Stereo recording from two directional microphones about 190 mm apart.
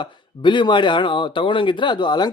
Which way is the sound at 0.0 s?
25° left (ahead or behind).